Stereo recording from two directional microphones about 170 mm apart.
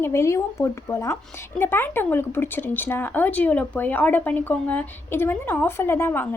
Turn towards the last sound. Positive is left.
turn(degrees=10)  # may be behind; listen again after turning